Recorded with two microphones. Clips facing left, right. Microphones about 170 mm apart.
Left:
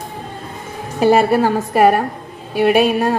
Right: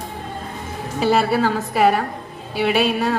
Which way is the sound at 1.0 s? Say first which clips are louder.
Left 5 dB; 50° left (ahead or behind).